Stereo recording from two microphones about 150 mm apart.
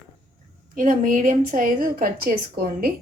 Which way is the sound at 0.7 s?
60° right (ahead or behind).